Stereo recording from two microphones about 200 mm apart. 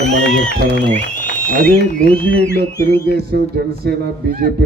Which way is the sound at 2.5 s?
50° right (ahead or behind).